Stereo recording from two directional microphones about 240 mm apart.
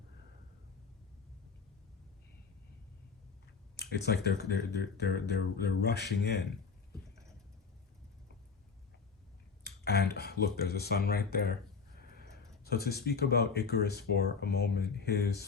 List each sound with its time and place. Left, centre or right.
3.8 s speech: left
9.6 s speech: left
12.6 s speech: left